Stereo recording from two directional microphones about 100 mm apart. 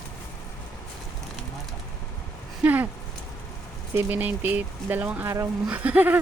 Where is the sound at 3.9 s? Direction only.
20° right (ahead or behind).